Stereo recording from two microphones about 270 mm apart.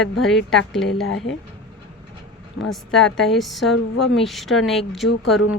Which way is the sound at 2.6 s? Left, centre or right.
Centre.